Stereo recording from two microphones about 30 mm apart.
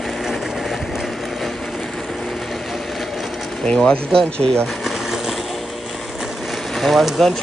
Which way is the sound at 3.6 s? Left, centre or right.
Left.